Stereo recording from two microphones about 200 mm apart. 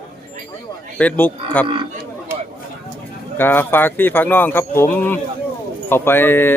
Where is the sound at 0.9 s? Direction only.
10° left (ahead or behind).